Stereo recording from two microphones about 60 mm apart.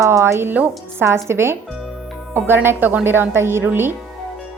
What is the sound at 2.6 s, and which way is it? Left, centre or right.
Speech, right.